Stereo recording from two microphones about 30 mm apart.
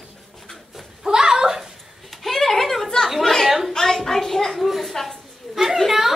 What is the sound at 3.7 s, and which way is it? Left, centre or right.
Hands, centre.